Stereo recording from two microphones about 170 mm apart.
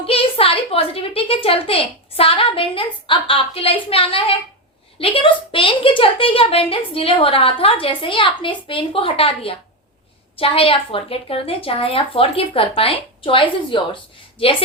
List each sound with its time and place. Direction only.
0.0 s a woman's voice: 35° left (ahead or behind)